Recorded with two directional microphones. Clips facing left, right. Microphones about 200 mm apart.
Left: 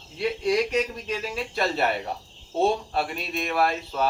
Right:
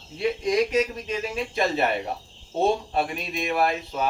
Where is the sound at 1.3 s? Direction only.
15° right (ahead or behind).